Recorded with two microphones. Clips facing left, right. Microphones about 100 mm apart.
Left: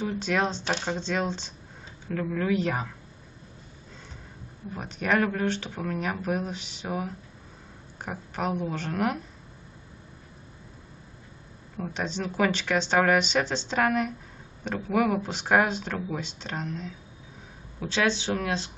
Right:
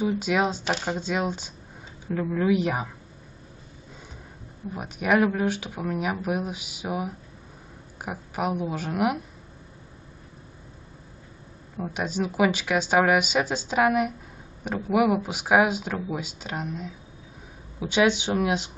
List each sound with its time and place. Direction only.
0.0 s speech: 10° right (ahead or behind)
4.7 s speech: 10° right (ahead or behind)
11.7 s speech: 10° right (ahead or behind)